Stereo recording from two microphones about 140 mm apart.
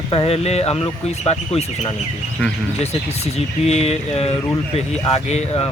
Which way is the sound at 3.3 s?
50° left (ahead or behind).